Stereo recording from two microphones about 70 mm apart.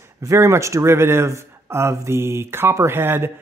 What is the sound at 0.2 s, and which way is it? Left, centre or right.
Speech, right.